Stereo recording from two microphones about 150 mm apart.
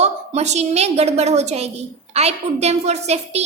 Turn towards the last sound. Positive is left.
turn(degrees=-45)  # may be behind; listen again after turning